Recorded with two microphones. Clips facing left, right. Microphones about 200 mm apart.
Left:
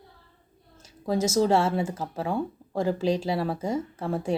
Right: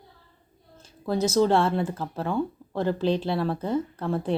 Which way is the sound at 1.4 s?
5° left (ahead or behind).